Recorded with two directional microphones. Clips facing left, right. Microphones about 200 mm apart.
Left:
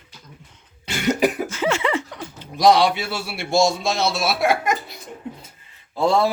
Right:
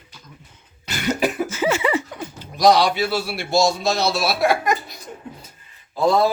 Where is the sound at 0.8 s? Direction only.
20° left (ahead or behind).